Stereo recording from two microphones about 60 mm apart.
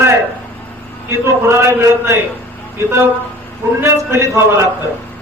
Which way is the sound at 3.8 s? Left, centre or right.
Right.